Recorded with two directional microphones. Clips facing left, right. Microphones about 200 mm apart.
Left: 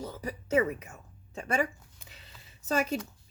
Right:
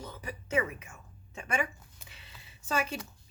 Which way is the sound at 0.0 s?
35° left (ahead or behind).